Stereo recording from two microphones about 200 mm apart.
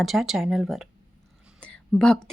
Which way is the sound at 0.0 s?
Centre (ahead or behind).